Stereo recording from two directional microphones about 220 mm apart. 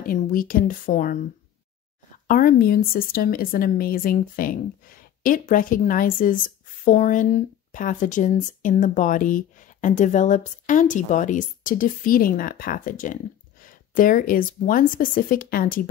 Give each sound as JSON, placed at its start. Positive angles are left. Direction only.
{"t": 0.0, "sound": "a woman's voice", "side_deg": 40}
{"t": 2.2, "sound": "speech", "side_deg": 40}